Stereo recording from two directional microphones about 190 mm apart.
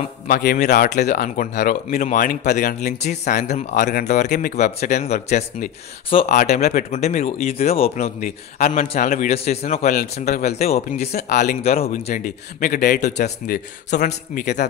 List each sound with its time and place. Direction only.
0.3 s a man's voice: 55° left (ahead or behind)
0.6 s a man's voice: 40° left (ahead or behind)